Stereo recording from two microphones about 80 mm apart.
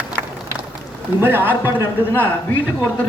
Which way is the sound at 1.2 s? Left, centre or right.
Right.